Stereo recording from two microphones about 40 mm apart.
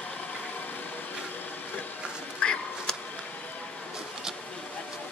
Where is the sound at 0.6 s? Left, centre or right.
Left.